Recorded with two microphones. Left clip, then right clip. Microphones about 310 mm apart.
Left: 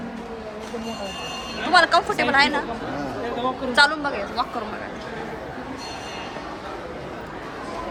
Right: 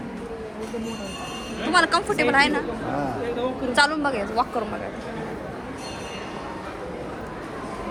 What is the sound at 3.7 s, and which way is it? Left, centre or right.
Speech, centre.